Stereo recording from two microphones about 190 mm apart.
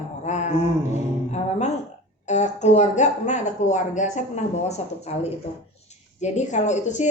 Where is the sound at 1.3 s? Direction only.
35° left (ahead or behind).